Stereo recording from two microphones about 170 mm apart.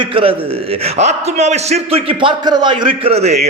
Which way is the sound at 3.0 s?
40° right (ahead or behind).